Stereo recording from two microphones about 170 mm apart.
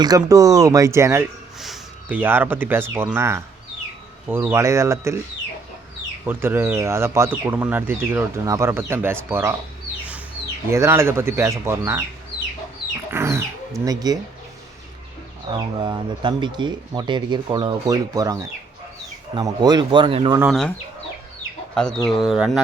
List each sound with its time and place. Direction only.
0.0 s speech: 20° right (ahead or behind)
1.5 s speech: centre (ahead or behind)
6.2 s speech: 10° right (ahead or behind)
10.7 s speech: 15° right (ahead or behind)
13.1 s a sound: 15° right (ahead or behind)
15.5 s speech: 25° right (ahead or behind)
20.5 s speech: centre (ahead or behind)
21.8 s speech: 5° left (ahead or behind)